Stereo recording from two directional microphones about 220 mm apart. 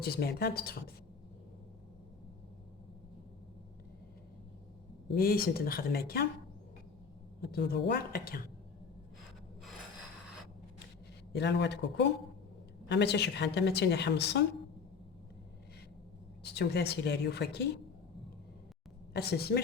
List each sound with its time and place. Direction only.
0.0 s a woman's voice: 45° left (ahead or behind)
5.1 s a woman's voice: 45° left (ahead or behind)
7.4 s a woman's voice: 45° left (ahead or behind)
11.3 s a woman's voice: 50° left (ahead or behind)
16.4 s a woman's voice: 50° left (ahead or behind)
19.1 s a woman's voice: 45° left (ahead or behind)